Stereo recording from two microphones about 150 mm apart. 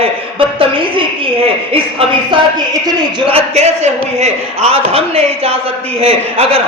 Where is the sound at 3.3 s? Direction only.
45° right (ahead or behind).